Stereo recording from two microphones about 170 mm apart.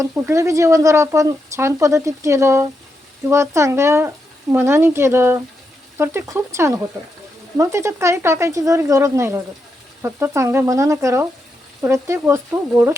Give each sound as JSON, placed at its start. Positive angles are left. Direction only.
{"t": 0.0, "sound": "speech", "side_deg": -15}